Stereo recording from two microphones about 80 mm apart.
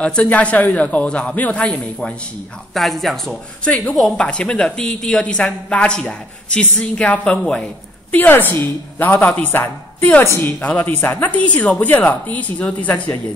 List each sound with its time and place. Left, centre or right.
0.0 s a woman's voice: centre
2.7 s speech: centre
3.6 s a woman's voice: centre